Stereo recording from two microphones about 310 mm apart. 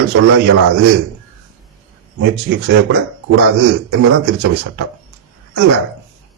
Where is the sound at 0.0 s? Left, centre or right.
Right.